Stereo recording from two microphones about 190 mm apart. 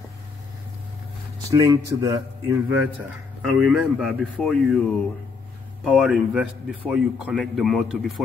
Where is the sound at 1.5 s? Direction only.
15° right (ahead or behind).